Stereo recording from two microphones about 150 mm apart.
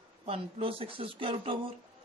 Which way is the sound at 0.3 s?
40° right (ahead or behind).